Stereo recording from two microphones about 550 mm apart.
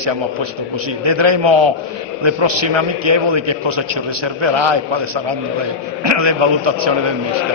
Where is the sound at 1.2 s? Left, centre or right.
Right.